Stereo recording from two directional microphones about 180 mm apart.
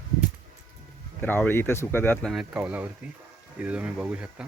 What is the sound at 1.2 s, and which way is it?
Speech, 10° left (ahead or behind).